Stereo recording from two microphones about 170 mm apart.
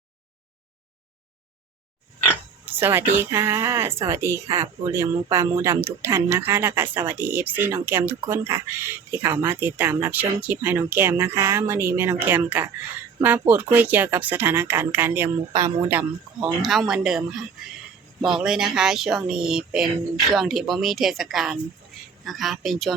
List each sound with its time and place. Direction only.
2.6 s speech: 10° right (ahead or behind)
15.9 s speech: 5° right (ahead or behind)